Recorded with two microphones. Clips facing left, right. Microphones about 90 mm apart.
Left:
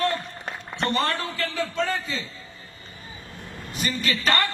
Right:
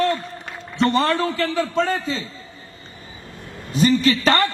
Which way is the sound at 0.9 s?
30° right (ahead or behind).